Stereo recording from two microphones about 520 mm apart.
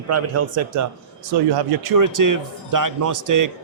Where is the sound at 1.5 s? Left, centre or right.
Right.